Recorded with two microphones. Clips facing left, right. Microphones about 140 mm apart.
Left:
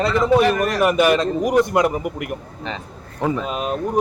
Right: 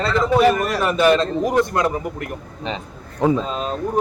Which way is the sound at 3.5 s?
15° left (ahead or behind).